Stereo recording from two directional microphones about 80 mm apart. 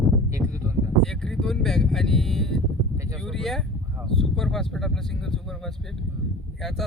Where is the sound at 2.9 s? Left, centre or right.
Right.